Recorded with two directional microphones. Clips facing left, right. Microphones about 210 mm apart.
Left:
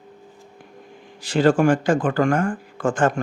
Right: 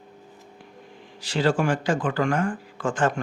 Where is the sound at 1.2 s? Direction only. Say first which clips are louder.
Left 6 dB; 50° left (ahead or behind).